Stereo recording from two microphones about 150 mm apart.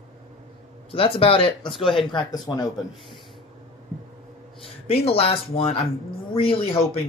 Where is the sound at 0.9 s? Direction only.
40° left (ahead or behind).